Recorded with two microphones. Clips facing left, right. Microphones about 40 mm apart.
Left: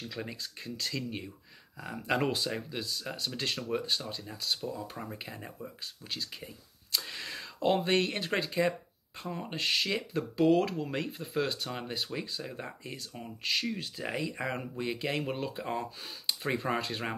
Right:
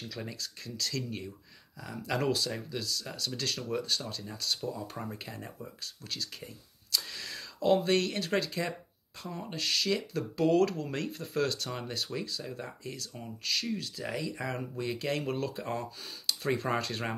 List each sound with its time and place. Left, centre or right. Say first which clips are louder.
0.1 s speech: left 1 dB; left
1.8 s speech: left 2 dB; left; by 6.5 s centre
7.1 s speech: left 2 dB; left
10.3 s speech: even; centre